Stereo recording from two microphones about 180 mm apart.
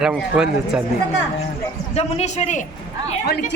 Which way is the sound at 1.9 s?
35° left (ahead or behind).